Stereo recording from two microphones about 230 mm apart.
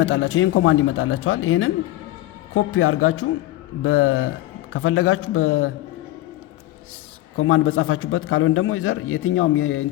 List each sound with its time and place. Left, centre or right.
0.0 s a man's voice: left
7.3 s a man's voice: left